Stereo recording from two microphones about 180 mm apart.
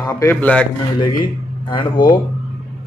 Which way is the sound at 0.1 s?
15° left (ahead or behind).